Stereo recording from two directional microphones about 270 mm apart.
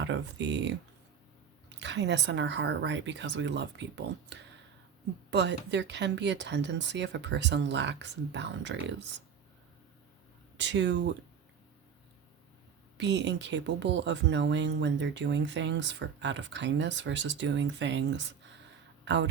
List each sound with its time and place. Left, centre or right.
0.0 s speech: right
1.7 s speech: right
10.6 s speech: right
13.0 s speech: right